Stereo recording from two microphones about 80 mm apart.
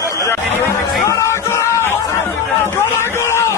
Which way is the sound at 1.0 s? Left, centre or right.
Left.